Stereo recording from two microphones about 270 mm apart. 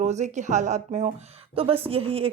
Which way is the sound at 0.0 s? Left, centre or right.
Right.